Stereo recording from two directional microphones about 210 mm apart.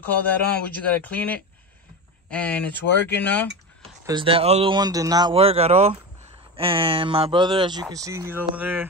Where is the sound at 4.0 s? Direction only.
20° right (ahead or behind).